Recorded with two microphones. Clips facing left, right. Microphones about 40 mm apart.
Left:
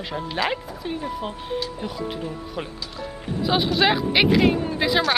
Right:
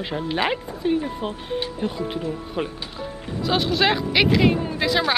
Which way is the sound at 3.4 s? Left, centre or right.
Centre.